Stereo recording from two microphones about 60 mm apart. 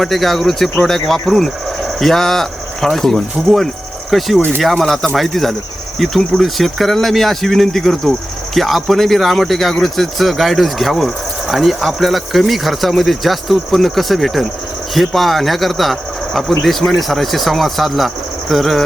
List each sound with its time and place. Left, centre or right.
0.0 s speech: centre
4.4 s speech: left
4.6 s speech: centre